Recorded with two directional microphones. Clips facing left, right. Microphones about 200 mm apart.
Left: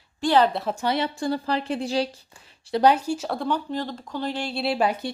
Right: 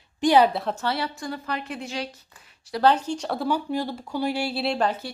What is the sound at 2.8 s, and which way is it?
Speech, 10° left (ahead or behind).